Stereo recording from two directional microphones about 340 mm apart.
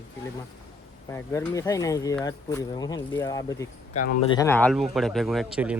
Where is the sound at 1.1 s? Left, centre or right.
Centre.